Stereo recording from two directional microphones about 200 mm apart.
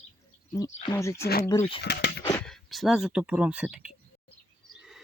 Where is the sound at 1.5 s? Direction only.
15° left (ahead or behind).